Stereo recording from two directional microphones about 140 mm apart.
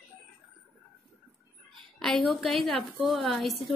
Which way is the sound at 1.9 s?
Centre (ahead or behind).